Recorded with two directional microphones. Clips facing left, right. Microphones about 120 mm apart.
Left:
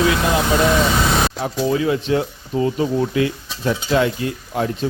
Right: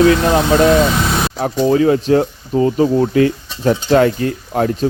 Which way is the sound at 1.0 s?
Centre (ahead or behind).